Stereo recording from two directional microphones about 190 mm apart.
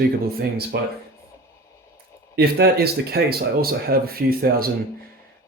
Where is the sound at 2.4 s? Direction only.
60° right (ahead or behind).